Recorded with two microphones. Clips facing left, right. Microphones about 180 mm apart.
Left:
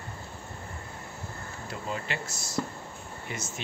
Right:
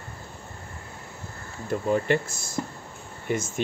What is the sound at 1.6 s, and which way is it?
Speech, 50° right (ahead or behind).